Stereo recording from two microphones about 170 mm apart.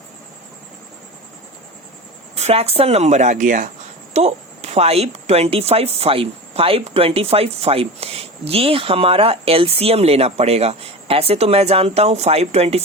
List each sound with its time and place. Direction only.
2.3 s a woman's voice: 35° right (ahead or behind)